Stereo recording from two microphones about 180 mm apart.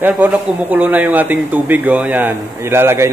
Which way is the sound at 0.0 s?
10° right (ahead or behind).